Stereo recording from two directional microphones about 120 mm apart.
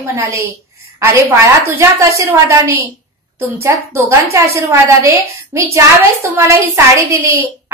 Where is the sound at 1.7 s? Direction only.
20° right (ahead or behind).